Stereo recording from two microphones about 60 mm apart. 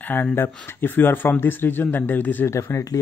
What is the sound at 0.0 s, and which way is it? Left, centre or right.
Speech, left.